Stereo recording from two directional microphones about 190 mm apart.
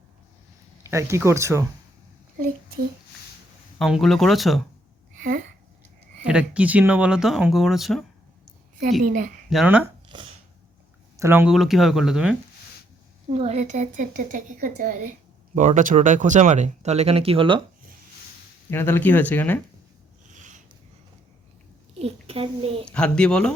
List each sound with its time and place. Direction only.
0.8 s speech: 15° right (ahead or behind)
3.8 s speech: centre (ahead or behind)
5.1 s a sound: 45° right (ahead or behind)
6.2 s speech: 5° right (ahead or behind)
9.0 s a woman's voice: 45° right (ahead or behind)
9.5 s speech: 5° right (ahead or behind)
10.1 s chopping: 25° right (ahead or behind)
11.2 s speech: 10° right (ahead or behind)
11.5 s speech: centre (ahead or behind)
13.3 s a woman's voice: 35° right (ahead or behind)
18.7 s speech: 10° left (ahead or behind)
20.3 s a sound: 40° right (ahead or behind)
21.9 s a child's voice: 30° right (ahead or behind)
22.9 s speech: 5° left (ahead or behind)